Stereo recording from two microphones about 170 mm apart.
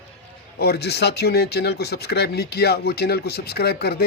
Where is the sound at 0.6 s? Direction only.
70° left (ahead or behind).